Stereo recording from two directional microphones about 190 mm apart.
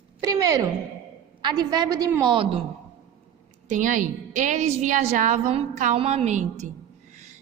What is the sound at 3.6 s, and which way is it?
A woman's voice, 40° right (ahead or behind).